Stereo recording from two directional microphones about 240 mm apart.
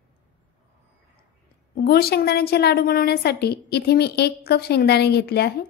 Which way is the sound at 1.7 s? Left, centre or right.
Left.